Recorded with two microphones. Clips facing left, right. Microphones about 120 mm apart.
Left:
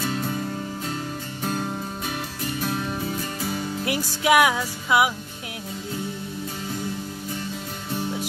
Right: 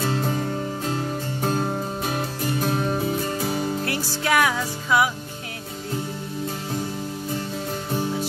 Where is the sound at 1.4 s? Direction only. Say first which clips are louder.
Right 3 dB; 35° right (ahead or behind).